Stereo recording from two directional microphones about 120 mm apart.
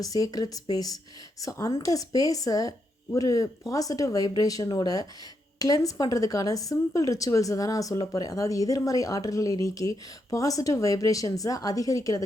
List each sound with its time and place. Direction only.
0.0 s a woman's voice: 30° left (ahead or behind)